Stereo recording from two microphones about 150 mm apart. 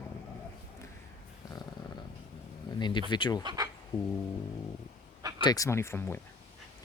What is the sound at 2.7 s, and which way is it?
Speech, 30° left (ahead or behind).